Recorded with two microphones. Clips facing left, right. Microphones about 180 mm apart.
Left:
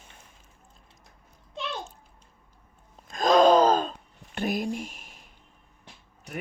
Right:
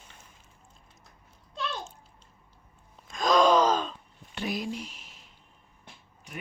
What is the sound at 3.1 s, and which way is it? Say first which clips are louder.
Gasp: left 4 dB; 50° left (ahead or behind).